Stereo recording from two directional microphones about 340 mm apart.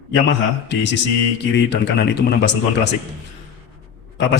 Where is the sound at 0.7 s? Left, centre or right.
Left.